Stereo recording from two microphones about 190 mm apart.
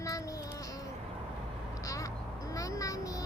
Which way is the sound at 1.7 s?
15° left (ahead or behind).